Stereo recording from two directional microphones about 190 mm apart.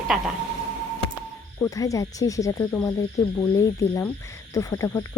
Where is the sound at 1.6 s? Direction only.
15° left (ahead or behind).